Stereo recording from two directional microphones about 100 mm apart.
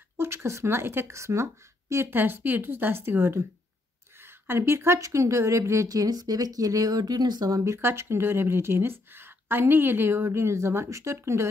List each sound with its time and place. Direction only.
0.2 s a woman's voice: 25° right (ahead or behind)